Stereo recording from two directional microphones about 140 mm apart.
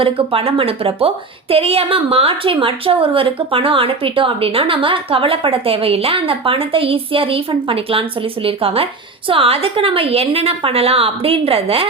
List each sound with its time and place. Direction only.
0.0 s a woman's voice: 40° right (ahead or behind)